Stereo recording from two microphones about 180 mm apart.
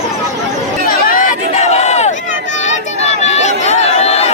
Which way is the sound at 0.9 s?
50° left (ahead or behind).